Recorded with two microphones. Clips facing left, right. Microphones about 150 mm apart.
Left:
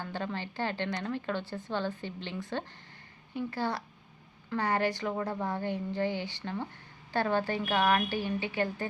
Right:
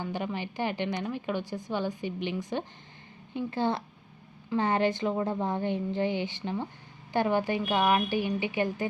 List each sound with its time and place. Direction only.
0.0 s a woman's voice: 15° right (ahead or behind)